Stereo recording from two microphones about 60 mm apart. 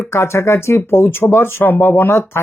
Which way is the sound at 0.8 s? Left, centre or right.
Left.